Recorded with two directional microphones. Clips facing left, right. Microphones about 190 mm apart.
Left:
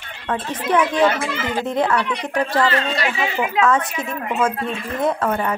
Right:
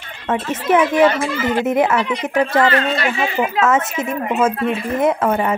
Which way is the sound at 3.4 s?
20° right (ahead or behind).